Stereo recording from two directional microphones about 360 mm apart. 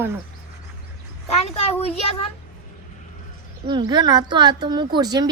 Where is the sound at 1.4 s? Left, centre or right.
Centre.